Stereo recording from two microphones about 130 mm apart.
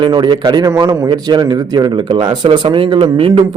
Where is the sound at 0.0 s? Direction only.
35° right (ahead or behind).